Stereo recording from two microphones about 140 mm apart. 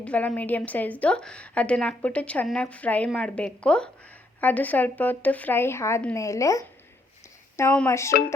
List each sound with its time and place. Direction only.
0.0 s a woman's voice: 10° left (ahead or behind)
7.9 s speech: 20° left (ahead or behind)